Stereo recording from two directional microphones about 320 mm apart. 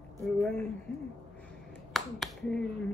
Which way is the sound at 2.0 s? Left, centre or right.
Centre.